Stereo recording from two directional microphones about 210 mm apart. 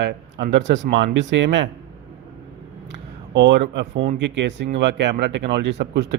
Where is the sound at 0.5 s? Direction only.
60° right (ahead or behind).